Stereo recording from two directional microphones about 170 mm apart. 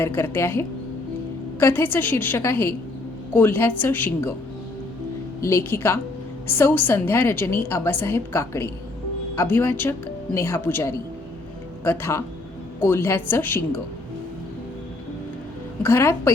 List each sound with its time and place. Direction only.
0.0 s a woman's voice: 15° left (ahead or behind)
5.4 s a woman's voice: 15° left (ahead or behind)
15.8 s a woman's voice: 15° left (ahead or behind)